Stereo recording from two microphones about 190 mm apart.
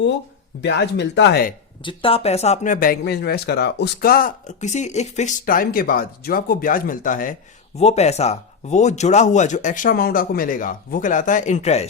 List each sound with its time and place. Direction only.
0.6 s speech: 65° left (ahead or behind)
1.8 s speech: 25° left (ahead or behind)